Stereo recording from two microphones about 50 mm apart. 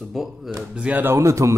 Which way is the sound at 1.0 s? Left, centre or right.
Right.